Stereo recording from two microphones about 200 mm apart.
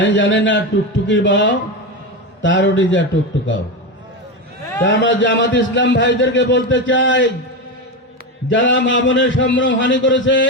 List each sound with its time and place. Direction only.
0.0 s a man's voice: 65° left (ahead or behind)
4.8 s a man's voice: 65° left (ahead or behind)
8.4 s a man's voice: 65° left (ahead or behind)